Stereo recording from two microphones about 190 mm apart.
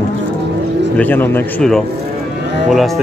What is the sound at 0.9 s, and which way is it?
A man's voice, 10° left (ahead or behind).